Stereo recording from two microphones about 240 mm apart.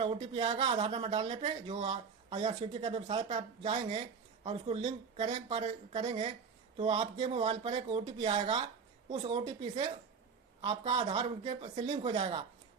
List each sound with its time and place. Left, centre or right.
0.0 s speech: right